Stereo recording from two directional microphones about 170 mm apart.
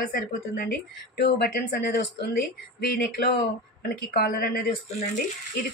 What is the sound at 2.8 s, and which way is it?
Speech, 65° left (ahead or behind).